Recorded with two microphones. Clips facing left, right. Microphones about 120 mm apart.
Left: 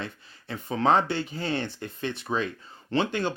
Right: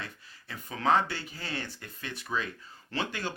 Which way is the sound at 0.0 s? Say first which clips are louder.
Left 6 dB; 25° left (ahead or behind).